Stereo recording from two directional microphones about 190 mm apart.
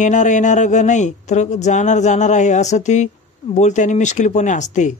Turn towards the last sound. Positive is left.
turn(degrees=40)  # may be behind; listen again after turning